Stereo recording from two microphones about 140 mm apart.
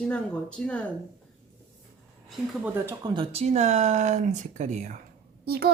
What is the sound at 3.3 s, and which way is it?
Speech, 50° right (ahead or behind).